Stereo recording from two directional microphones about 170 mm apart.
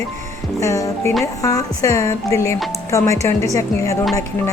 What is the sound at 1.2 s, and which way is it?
Speech, 20° left (ahead or behind).